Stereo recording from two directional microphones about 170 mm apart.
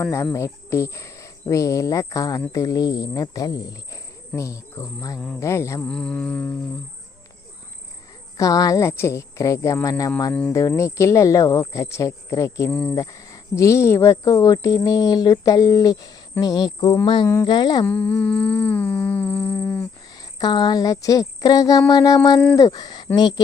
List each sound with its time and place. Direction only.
0.0 s speech: 15° left (ahead or behind)
5.8 s mantra: 5° left (ahead or behind)
8.4 s speech: 20° left (ahead or behind)
17.8 s humming: 10° left (ahead or behind)
20.1 s speech: 25° left (ahead or behind)